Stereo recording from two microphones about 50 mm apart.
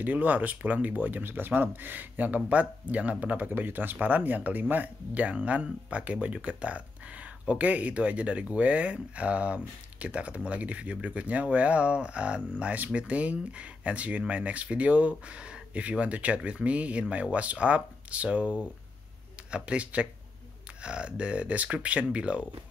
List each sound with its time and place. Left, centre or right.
0.0 s speech: right